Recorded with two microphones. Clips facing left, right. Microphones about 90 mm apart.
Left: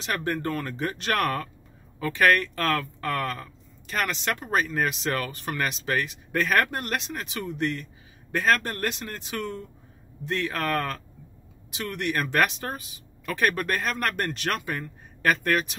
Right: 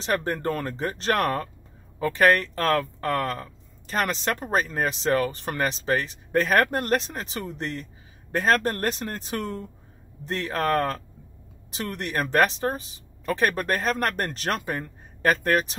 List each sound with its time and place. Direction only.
0.0 s speech: 35° right (ahead or behind)